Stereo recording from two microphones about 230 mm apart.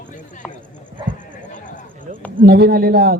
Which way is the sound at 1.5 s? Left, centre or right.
Left.